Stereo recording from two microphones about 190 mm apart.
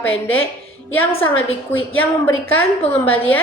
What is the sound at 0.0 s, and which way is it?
A woman's voice, 90° left.